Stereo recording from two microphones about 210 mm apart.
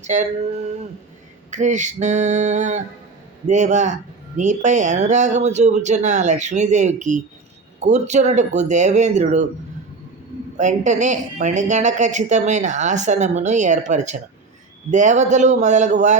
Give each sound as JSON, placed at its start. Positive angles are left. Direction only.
{"t": 0.0, "sound": "a sound", "side_deg": -35}
{"t": 1.5, "sound": "speech", "side_deg": -35}
{"t": 10.6, "sound": "speech", "side_deg": -35}